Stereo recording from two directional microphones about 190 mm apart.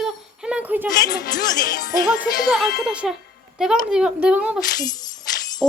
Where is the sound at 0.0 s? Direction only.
5° right (ahead or behind).